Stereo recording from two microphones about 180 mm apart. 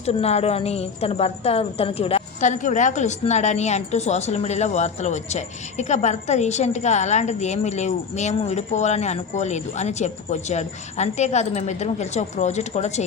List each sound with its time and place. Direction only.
0.0 s a woman's voice: 35° left (ahead or behind)